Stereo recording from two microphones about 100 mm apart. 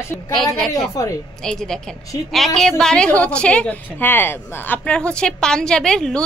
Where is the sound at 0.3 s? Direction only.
Centre (ahead or behind).